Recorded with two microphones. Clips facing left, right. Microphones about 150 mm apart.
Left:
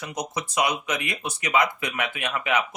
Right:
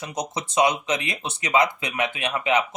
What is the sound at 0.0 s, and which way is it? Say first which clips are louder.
Speech: right 1 dB; 20° right (ahead or behind).